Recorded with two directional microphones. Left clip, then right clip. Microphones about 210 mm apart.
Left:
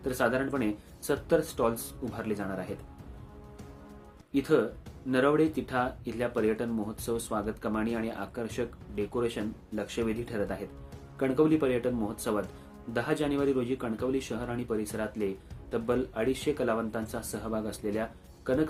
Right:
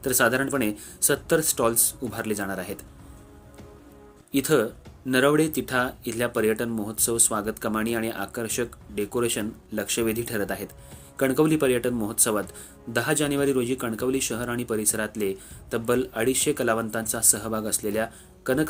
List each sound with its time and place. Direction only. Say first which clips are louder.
0.0 s a man's voice: right 6 dB; 45° right (ahead or behind)
4.3 s a man's voice: right 4 dB; 40° right (ahead or behind)